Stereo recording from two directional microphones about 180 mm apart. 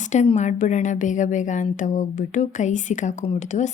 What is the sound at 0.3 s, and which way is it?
Speech, 40° left (ahead or behind).